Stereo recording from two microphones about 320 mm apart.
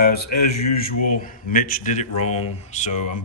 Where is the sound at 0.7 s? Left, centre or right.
Left.